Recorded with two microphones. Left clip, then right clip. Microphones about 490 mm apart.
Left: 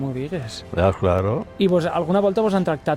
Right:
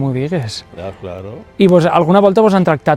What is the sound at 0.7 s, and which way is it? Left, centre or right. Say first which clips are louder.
Speech: left 12 dB; left.